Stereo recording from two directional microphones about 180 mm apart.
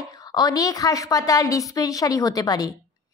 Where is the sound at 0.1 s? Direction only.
20° left (ahead or behind).